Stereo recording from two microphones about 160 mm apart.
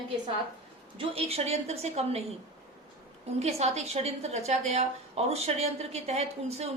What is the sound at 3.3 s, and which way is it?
A woman's voice, 40° right (ahead or behind).